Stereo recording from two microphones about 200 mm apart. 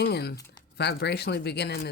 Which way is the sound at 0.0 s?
55° left (ahead or behind).